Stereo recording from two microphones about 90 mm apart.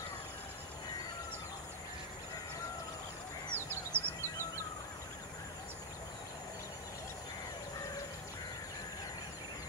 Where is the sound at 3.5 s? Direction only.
25° right (ahead or behind).